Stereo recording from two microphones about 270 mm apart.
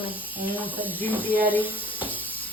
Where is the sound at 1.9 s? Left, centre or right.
Centre.